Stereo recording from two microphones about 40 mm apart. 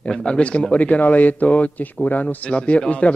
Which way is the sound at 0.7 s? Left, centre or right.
Left.